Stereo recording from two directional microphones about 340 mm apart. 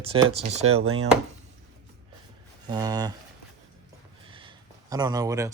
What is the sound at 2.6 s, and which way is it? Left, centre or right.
Speech, centre.